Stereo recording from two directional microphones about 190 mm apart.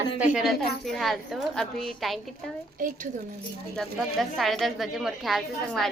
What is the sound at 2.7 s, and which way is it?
Speech, 50° right (ahead or behind).